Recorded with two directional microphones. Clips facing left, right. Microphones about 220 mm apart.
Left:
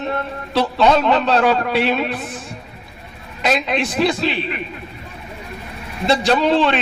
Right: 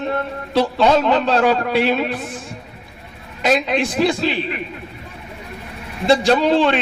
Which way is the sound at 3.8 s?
45° right (ahead or behind).